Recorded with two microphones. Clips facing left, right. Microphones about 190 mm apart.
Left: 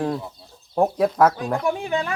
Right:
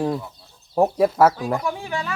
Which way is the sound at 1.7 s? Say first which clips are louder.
Left 4 dB; 20° left (ahead or behind).